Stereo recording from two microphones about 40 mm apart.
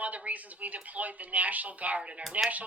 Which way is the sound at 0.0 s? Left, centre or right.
Right.